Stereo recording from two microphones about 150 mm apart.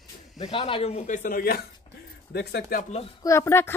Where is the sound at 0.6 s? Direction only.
40° left (ahead or behind); by 1.6 s 80° left.